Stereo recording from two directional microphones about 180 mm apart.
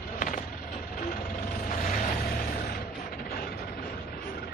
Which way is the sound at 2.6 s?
55° left (ahead or behind).